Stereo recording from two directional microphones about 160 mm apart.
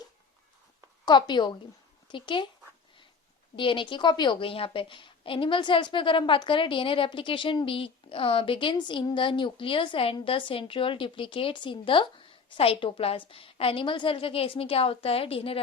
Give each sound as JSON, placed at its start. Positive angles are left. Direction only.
{"t": 1.0, "sound": "a woman's voice", "side_deg": 25}
{"t": 3.5, "sound": "a woman's voice", "side_deg": 30}